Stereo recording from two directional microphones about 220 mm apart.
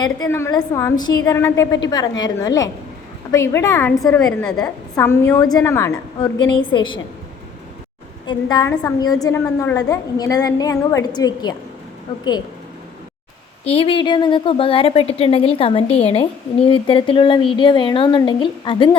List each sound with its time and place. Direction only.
0.0 s a woman's voice: 15° left (ahead or behind)
8.3 s a woman's voice: 20° left (ahead or behind)
13.7 s a woman's voice: 25° left (ahead or behind)